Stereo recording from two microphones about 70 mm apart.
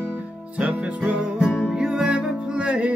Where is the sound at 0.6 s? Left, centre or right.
Centre.